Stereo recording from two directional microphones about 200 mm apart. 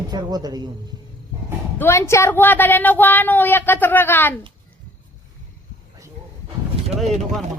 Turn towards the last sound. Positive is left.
turn(degrees=0)  # may be behind; listen again after turning